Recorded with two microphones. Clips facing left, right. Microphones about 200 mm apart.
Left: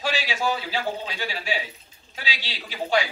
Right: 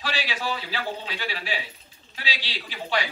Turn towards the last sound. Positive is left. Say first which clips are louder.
# left 4 dB
turn(degrees=45)  # may be behind; listen again after turning